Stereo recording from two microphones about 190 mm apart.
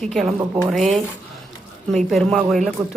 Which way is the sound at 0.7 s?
Centre (ahead or behind).